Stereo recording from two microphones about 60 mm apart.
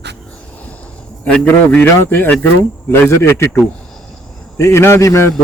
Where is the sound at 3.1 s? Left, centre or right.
Left.